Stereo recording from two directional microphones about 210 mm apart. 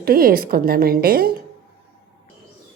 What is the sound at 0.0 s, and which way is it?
A woman's voice, 45° right (ahead or behind).